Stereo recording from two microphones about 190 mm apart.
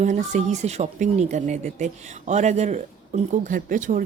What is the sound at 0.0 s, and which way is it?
Speech, 40° right (ahead or behind).